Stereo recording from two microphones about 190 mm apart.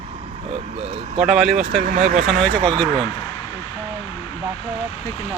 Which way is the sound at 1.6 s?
50° right (ahead or behind).